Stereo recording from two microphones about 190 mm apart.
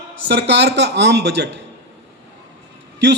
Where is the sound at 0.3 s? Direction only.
65° right (ahead or behind).